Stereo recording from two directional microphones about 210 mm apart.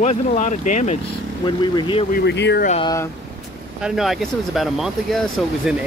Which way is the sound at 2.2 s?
55° left (ahead or behind).